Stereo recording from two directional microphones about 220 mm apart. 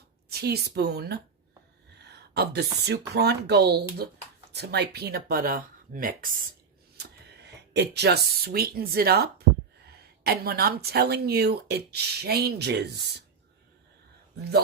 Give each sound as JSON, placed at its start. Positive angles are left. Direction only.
{"t": 0.3, "sound": "speech", "side_deg": -45}
{"t": 2.0, "sound": "a sound", "side_deg": -50}
{"t": 2.8, "sound": "speech", "side_deg": -50}